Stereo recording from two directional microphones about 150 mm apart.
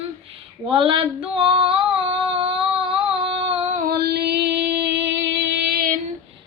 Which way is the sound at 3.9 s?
90° right.